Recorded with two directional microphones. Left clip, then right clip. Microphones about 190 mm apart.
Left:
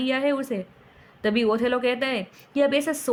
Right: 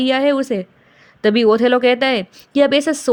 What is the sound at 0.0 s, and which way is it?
A woman's voice, 40° right (ahead or behind).